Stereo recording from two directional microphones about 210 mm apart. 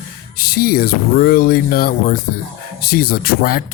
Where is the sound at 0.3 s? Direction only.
45° left (ahead or behind).